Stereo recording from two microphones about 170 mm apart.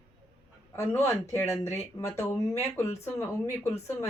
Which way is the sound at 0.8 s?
15° left (ahead or behind).